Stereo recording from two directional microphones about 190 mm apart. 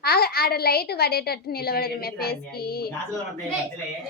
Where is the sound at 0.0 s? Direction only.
55° left (ahead or behind).